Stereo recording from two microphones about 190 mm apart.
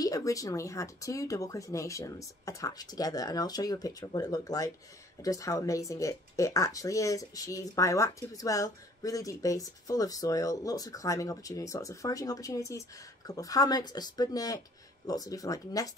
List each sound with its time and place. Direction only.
0.0 s speech: 20° left (ahead or behind)